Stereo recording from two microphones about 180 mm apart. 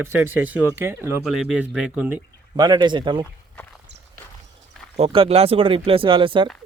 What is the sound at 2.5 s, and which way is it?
Speech, 25° right (ahead or behind).